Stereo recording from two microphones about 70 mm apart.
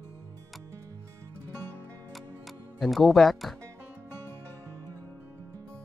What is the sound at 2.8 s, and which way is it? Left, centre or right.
Speech, centre.